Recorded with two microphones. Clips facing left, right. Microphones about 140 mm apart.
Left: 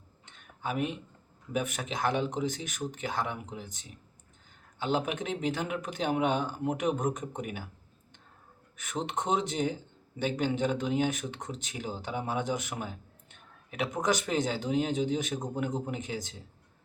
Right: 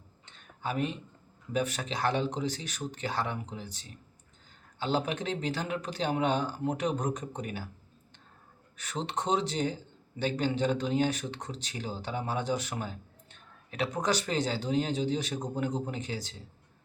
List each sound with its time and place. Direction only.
0.6 s speech: 10° left (ahead or behind)
8.9 s speech: 20° left (ahead or behind)
15.1 s a man's voice: centre (ahead or behind)
15.6 s speech: 10° left (ahead or behind)